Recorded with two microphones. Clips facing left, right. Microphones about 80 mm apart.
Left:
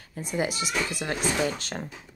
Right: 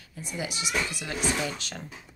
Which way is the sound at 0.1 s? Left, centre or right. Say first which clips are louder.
Left 6 dB; left.